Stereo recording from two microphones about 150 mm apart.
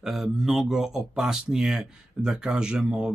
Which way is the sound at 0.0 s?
Centre (ahead or behind).